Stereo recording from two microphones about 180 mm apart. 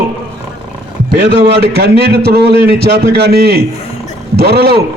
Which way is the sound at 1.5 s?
60° right (ahead or behind).